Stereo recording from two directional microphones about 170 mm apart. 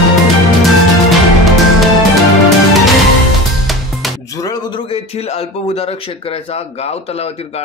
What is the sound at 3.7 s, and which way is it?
Music, centre (ahead or behind).